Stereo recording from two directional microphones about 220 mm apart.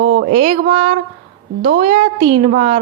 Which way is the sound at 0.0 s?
50° right (ahead or behind).